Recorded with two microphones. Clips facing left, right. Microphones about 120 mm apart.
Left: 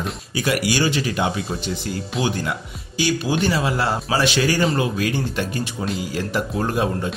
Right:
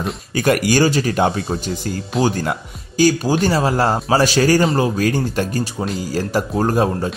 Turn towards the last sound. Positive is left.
turn(degrees=-35)  # may be behind; listen again after turning